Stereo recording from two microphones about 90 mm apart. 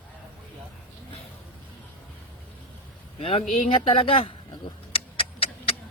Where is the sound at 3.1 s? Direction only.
90° left.